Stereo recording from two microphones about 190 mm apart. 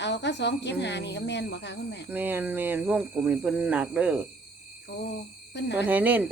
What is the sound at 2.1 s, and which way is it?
Speech, 10° right (ahead or behind).